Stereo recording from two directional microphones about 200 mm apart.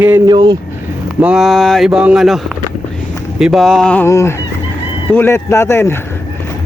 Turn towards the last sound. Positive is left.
turn(degrees=10)  # may be behind; listen again after turning